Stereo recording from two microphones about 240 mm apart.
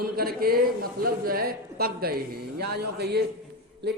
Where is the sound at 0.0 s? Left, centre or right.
Right.